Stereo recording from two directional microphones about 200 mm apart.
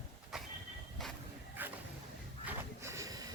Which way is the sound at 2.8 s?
15° right (ahead or behind).